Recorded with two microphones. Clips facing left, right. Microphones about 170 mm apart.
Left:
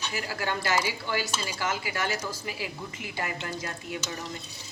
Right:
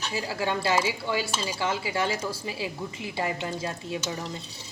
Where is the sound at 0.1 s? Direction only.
25° right (ahead or behind).